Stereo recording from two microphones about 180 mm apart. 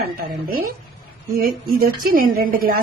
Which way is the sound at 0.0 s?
55° right (ahead or behind).